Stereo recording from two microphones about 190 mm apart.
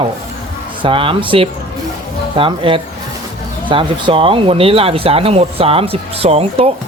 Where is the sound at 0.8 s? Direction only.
30° right (ahead or behind).